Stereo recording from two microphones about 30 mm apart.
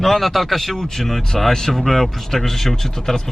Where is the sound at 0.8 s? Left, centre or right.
Centre.